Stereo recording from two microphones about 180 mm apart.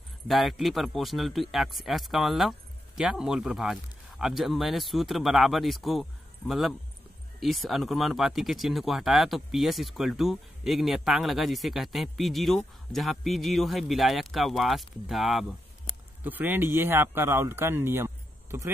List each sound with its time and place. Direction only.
0.3 s speech: centre (ahead or behind)